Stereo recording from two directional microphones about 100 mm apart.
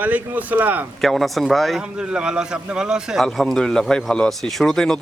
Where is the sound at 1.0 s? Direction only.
Centre (ahead or behind).